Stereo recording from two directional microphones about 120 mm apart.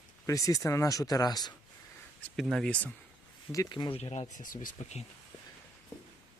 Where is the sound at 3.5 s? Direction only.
25° left (ahead or behind).